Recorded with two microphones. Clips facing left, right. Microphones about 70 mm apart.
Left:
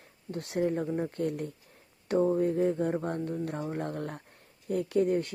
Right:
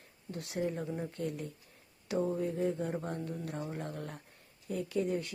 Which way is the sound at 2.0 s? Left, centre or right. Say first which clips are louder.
Left 7 dB; left.